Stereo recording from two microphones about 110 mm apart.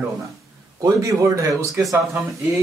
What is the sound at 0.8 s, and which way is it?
Speech, 30° right (ahead or behind).